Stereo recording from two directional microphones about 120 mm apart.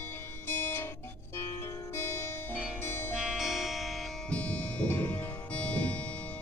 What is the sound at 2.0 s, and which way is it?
Music, 20° left (ahead or behind).